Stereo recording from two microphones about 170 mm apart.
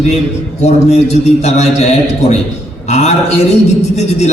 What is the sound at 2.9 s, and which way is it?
A man's voice, 40° left (ahead or behind).